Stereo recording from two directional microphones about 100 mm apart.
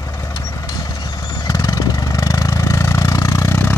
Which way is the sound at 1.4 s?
35° left (ahead or behind).